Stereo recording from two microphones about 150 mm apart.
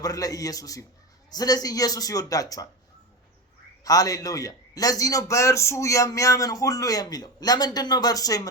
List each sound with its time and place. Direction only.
0.0 s a man's voice: 25° left (ahead or behind)
3.8 s a man's voice: 25° left (ahead or behind)